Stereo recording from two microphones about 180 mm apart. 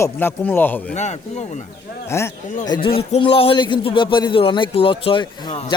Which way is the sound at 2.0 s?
15° left (ahead or behind).